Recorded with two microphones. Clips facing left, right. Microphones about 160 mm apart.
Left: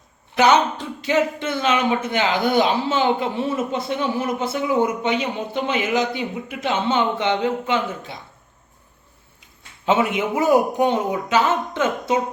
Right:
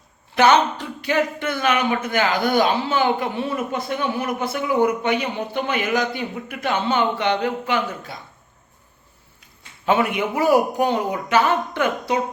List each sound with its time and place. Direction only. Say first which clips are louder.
0.3 s speech: even; 15° left (ahead or behind)
9.8 s speech: even; 20° left (ahead or behind)